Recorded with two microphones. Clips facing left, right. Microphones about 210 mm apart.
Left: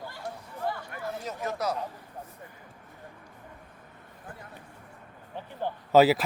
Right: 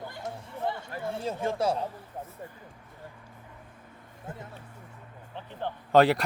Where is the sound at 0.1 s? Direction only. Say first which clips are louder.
Right 1 dB; 20° right (ahead or behind).